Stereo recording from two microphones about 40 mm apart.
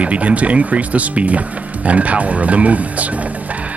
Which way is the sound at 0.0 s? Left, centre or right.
Right.